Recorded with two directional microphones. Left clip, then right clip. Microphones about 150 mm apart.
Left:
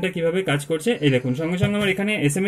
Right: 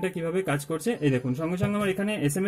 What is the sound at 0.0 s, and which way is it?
Speech, 30° right (ahead or behind).